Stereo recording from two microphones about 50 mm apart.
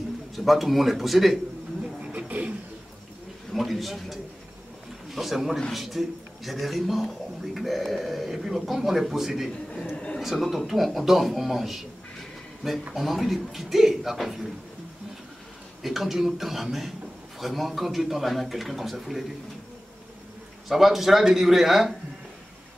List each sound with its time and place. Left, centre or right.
0.4 s speech: centre
1.8 s music: right
3.5 s speech: centre
9.5 s a man's voice: centre
9.9 s a sound: centre
10.2 s speech: centre
12.9 s speech: centre
15.8 s speech: centre
20.6 s speech: centre